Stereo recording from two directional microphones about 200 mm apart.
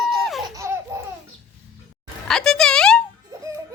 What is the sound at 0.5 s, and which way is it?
Laughter, 15° right (ahead or behind).